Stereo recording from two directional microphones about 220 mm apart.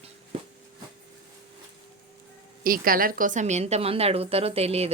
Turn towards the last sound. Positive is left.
turn(degrees=-30)  # may be behind; listen again after turning